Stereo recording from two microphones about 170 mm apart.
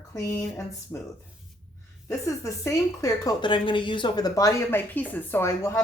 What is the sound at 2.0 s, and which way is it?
A woman's voice, 15° left (ahead or behind).